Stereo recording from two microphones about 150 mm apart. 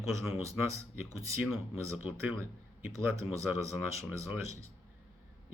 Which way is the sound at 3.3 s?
20° right (ahead or behind).